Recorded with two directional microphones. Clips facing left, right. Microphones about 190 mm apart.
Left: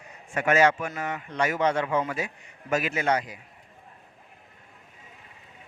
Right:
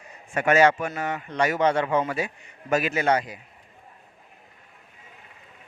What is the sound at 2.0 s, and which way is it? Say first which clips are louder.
Speech: right 3 dB; 30° right (ahead or behind).